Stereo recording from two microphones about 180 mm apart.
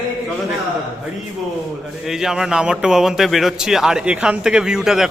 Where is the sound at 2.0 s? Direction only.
Centre (ahead or behind).